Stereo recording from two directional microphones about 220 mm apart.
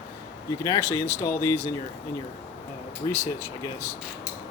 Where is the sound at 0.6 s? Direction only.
10° left (ahead or behind).